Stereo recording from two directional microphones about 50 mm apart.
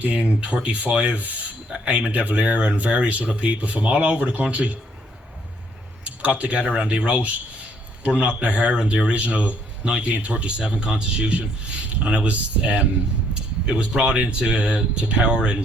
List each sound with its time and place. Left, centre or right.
0.0 s speech: right
6.1 s speech: right